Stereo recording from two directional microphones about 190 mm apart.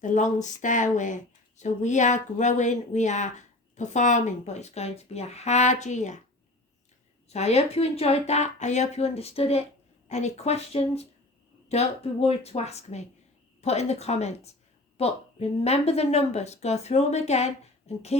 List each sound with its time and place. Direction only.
0.0 s speech: 40° left (ahead or behind)
7.3 s speech: 35° left (ahead or behind)